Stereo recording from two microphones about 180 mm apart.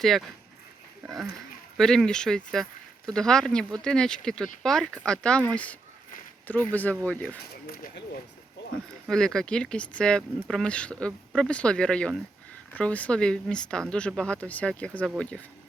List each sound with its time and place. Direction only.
0.0 s speech: centre (ahead or behind)
1.8 s speech: 5° left (ahead or behind)
7.5 s speech: 60° left (ahead or behind)
9.0 s speech: 5° left (ahead or behind)